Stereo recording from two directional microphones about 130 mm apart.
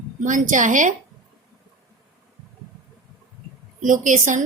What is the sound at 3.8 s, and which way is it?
Speech, 80° right.